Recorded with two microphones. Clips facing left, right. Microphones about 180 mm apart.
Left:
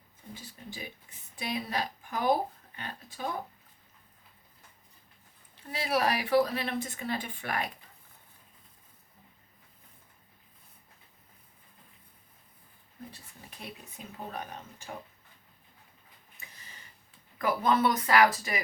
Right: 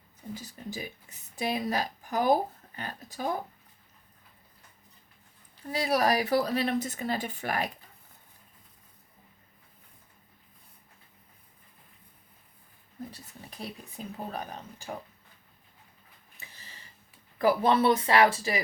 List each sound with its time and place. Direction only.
0.3 s a woman's voice: 40° right (ahead or behind)
5.7 s speech: 35° right (ahead or behind)
13.6 s speech: 35° right (ahead or behind)
17.3 s speech: 30° right (ahead or behind)